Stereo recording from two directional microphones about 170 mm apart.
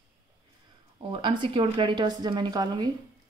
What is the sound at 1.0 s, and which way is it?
Speech, 30° right (ahead or behind).